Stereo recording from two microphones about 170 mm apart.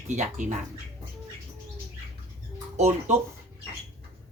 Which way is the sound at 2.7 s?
40° right (ahead or behind).